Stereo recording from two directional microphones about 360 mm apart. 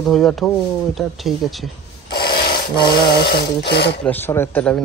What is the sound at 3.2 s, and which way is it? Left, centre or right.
Speech, left.